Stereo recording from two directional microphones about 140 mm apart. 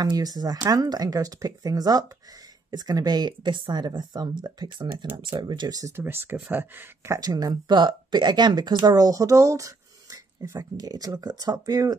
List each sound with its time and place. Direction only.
0.0 s speech: 30° right (ahead or behind)
7.2 s speech: 25° right (ahead or behind)